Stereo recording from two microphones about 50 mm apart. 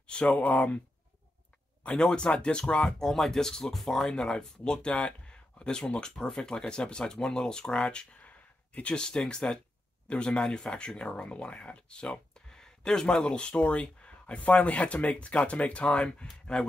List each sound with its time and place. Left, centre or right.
0.0 s speech: left
2.0 s speech: centre